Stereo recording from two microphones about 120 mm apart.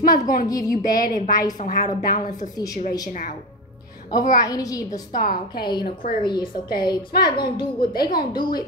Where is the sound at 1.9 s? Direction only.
35° left (ahead or behind).